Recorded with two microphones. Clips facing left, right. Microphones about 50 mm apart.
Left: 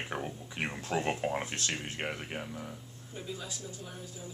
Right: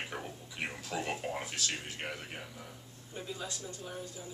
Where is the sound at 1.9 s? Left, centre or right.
Left.